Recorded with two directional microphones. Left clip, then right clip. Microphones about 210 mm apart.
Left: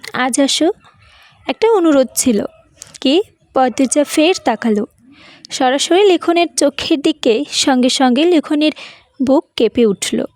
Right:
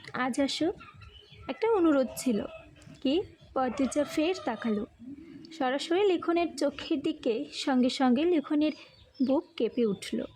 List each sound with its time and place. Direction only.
0.0 s a woman's voice: 45° left (ahead or behind)